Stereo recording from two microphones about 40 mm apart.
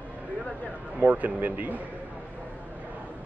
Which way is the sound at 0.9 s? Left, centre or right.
Right.